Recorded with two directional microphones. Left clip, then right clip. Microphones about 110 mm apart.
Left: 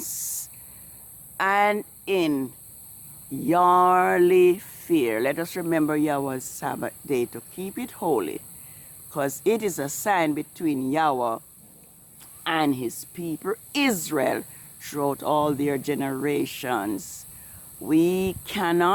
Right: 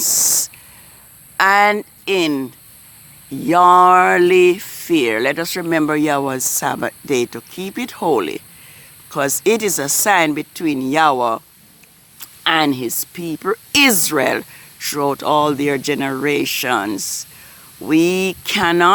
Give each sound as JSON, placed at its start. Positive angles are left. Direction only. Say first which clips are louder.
{"t": 0.0, "sound": "a sound", "louder": "right 18 dB", "side_deg": -55}
{"t": 1.4, "sound": "speech", "louder": "right 9 dB", "side_deg": -60}
{"t": 9.0, "sound": "speech", "louder": "right 8 dB", "side_deg": -45}
{"t": 12.2, "sound": "speech", "louder": "right 9 dB", "side_deg": -60}